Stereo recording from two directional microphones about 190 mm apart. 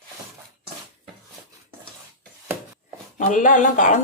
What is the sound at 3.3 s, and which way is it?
Speech, 45° left (ahead or behind).